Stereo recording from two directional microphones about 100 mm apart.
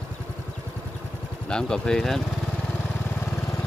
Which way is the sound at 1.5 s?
5° left (ahead or behind).